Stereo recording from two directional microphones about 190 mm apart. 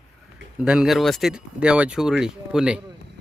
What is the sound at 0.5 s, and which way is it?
Speech, 5° right (ahead or behind).